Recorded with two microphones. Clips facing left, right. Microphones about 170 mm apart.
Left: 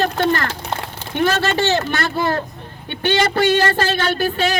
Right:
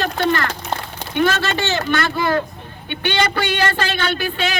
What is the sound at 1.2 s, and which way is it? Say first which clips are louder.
Speech: left 1 dB; 40° left (ahead or behind).